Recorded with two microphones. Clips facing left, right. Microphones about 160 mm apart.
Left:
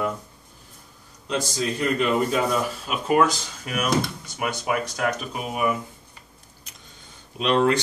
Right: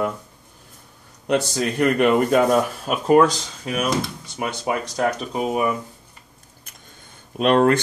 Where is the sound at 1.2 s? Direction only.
65° right (ahead or behind); by 3.2 s 45° right (ahead or behind).